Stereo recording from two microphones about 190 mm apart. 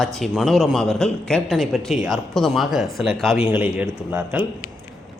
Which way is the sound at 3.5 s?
10° right (ahead or behind).